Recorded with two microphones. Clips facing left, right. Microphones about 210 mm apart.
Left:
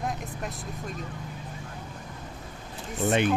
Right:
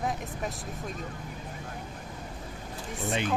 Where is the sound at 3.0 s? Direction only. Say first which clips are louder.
Left 7 dB; 65° left (ahead or behind).